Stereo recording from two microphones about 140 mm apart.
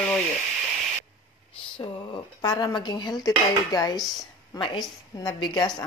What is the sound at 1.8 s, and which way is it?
Speech, 30° left (ahead or behind).